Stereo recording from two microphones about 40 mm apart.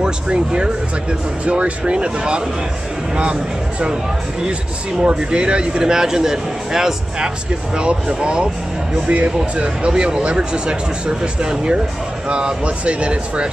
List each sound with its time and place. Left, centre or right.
0.0 s speech: right
5.0 s speech: right
7.7 s speech: right
8.9 s speech: right